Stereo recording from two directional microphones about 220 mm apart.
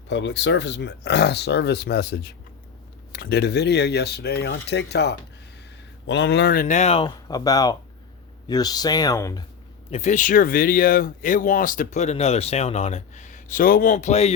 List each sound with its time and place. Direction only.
0.1 s speech: 55° left (ahead or behind); by 9.4 s 15° left (ahead or behind)
9.9 s speech: 30° left (ahead or behind)